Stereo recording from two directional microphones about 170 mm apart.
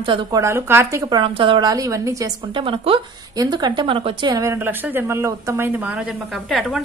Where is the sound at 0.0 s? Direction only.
30° right (ahead or behind).